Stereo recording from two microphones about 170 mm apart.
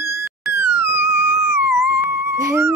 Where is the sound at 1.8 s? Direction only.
15° right (ahead or behind).